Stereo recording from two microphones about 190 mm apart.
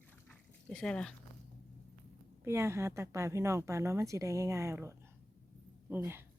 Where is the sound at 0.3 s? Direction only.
5° left (ahead or behind).